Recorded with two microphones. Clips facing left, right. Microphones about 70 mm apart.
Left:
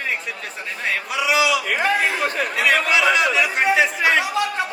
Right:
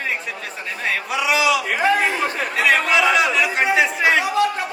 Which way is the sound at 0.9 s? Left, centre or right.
Centre.